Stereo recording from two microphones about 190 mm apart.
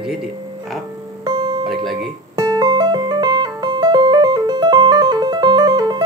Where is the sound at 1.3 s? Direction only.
20° right (ahead or behind).